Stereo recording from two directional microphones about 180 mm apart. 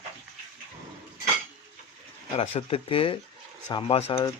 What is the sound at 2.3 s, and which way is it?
Cutlery, 35° left (ahead or behind).